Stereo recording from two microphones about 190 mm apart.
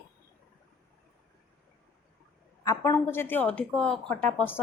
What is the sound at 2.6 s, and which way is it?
A woman's voice, 15° left (ahead or behind).